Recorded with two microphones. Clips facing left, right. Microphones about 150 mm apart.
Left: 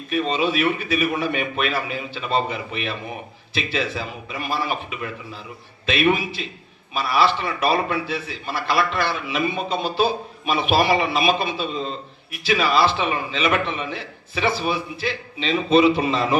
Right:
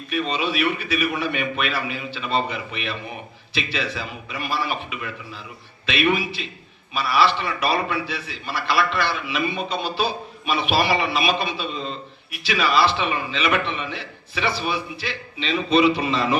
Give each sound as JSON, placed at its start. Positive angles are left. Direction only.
{"t": 0.1, "sound": "a man's voice", "side_deg": 40}